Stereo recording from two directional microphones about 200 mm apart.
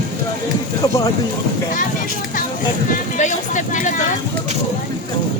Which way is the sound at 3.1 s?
40° left (ahead or behind).